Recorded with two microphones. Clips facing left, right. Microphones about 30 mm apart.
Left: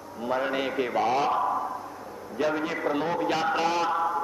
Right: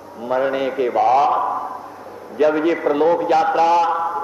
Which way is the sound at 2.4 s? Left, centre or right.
Right.